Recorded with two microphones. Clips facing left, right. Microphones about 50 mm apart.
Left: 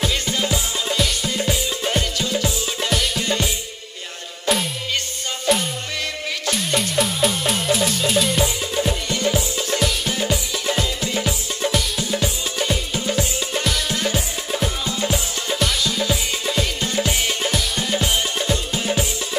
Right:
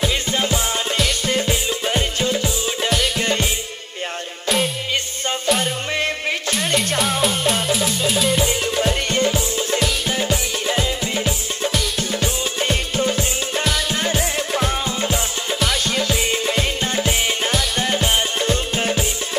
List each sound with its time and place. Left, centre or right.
7.7 s music: centre
10.8 s music: right
16.3 s music: right